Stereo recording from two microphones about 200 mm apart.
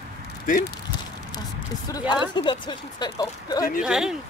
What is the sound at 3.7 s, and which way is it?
Speech, 5° right (ahead or behind).